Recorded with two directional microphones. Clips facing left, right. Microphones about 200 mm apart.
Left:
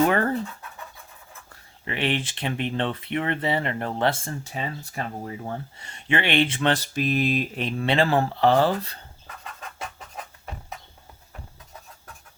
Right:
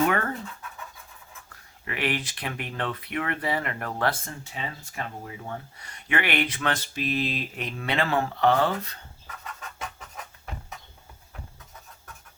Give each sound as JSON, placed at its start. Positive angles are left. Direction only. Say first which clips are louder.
{"t": 0.1, "sound": "speech", "louder": "left 4 dB", "side_deg": 30}
{"t": 1.8, "sound": "speech", "louder": "left 3 dB", "side_deg": 25}
{"t": 4.5, "sound": "speech", "louder": "left 3 dB", "side_deg": 40}
{"t": 6.9, "sound": "mantra", "louder": "left 5 dB", "side_deg": 45}
{"t": 7.6, "sound": "speech", "louder": "left 4 dB", "side_deg": 30}